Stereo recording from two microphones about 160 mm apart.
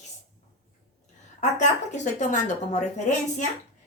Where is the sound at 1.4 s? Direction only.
50° left (ahead or behind).